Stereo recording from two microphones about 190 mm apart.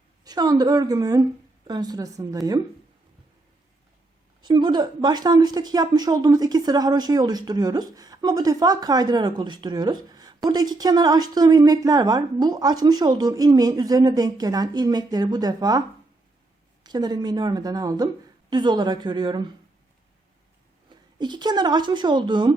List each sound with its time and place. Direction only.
0.3 s speech: 20° right (ahead or behind)
4.4 s speech: 25° right (ahead or behind)
16.8 s speech: 20° right (ahead or behind)
20.9 s speech: 25° right (ahead or behind)